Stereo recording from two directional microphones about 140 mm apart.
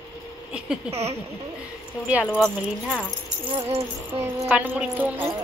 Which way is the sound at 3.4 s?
40° right (ahead or behind).